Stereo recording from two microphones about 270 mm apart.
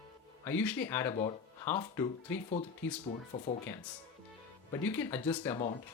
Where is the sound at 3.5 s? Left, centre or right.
Left.